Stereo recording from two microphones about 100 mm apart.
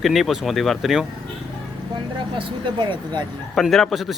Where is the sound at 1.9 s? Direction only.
55° right (ahead or behind).